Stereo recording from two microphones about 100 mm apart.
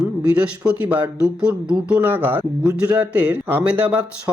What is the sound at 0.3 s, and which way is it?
Speech, 15° right (ahead or behind).